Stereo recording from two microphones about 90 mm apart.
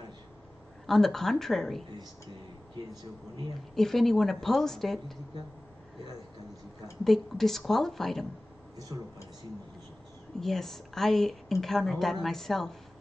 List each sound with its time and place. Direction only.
0.8 s a woman's voice: 5° left (ahead or behind)
2.7 s speech: 50° right (ahead or behind)
3.7 s a woman's voice: 5° left (ahead or behind)
7.1 s a woman's voice: 5° left (ahead or behind)
10.4 s a woman's voice: 5° left (ahead or behind)